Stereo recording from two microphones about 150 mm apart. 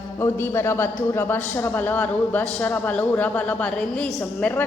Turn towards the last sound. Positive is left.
turn(degrees=10)  # may be behind; listen again after turning